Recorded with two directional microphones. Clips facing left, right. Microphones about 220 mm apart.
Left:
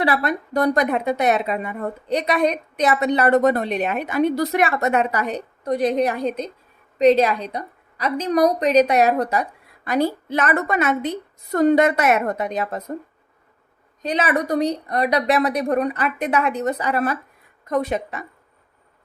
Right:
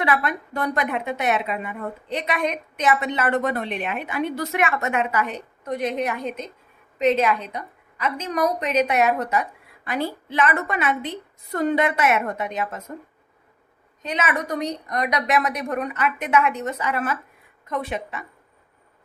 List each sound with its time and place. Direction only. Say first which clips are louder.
0.0 s a woman's voice: left 3 dB; 35° left (ahead or behind)
14.0 s a woman's voice: left 5 dB; 35° left (ahead or behind)